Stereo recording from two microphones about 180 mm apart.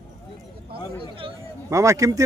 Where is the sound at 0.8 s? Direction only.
25° left (ahead or behind).